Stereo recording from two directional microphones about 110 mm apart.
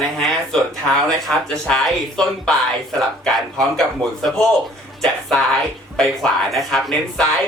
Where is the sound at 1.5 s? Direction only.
5° left (ahead or behind).